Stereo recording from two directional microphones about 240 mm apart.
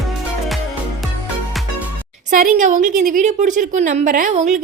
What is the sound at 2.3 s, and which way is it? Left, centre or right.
A woman's voice, right.